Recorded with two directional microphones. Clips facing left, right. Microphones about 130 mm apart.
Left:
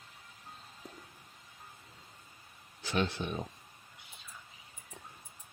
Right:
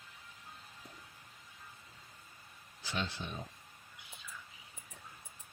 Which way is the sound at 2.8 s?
60° left (ahead or behind).